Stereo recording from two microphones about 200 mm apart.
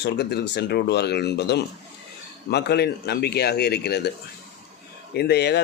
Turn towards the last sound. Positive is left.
turn(degrees=55)  # may be behind; listen again after turning